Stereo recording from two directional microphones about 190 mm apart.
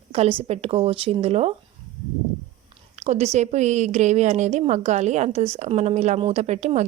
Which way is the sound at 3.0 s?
35° right (ahead or behind).